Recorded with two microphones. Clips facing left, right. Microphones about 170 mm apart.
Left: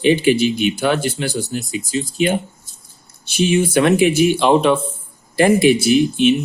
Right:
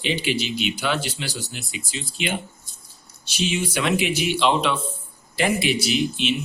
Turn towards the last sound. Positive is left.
turn(degrees=50)  # may be behind; listen again after turning